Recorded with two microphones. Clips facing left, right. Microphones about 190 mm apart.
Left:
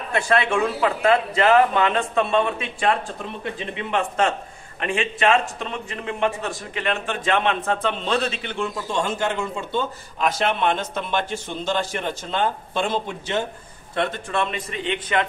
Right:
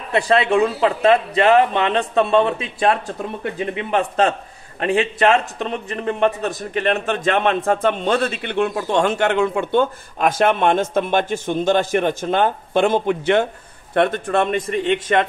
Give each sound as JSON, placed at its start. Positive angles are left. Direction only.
{"t": 0.1, "sound": "a man's voice", "side_deg": -25}